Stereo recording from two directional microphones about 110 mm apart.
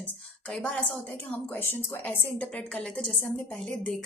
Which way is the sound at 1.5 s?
20° left (ahead or behind).